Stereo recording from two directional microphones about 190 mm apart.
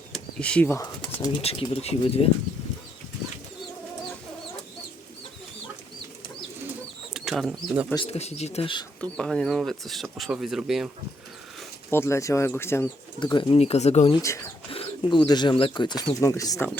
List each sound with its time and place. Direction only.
0.1 s speech: 5° left (ahead or behind)
1.4 s speech: 30° left (ahead or behind)
7.1 s speech: centre (ahead or behind)
7.9 s speech: 30° left (ahead or behind)
9.0 s speech: 5° left (ahead or behind)
11.9 s speech: 15° left (ahead or behind)
13.1 s speech: 25° left (ahead or behind)
14.1 s speech: 15° left (ahead or behind)
14.7 s speech: 30° left (ahead or behind)